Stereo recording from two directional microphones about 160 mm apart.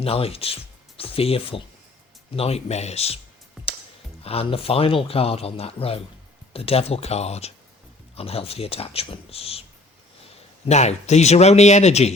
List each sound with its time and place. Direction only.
0.0 s speech: 35° left (ahead or behind)
4.2 s speech: 40° left (ahead or behind)
10.7 s speech: 45° left (ahead or behind)